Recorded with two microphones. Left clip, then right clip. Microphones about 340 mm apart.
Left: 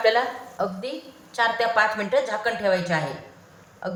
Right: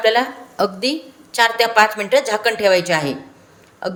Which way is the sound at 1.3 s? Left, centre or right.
Right.